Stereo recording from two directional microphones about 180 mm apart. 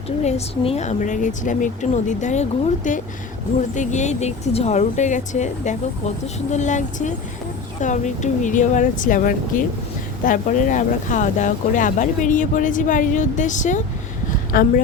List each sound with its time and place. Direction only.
0.2 s speech: 35° left (ahead or behind); by 14.7 s 50° left (ahead or behind)